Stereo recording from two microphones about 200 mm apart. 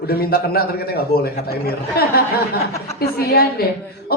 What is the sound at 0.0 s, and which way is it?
A woman's voice, 50° left (ahead or behind).